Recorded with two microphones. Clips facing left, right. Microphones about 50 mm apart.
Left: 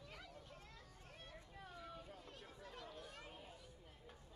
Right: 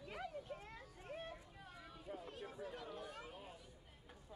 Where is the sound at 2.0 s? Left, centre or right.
Centre.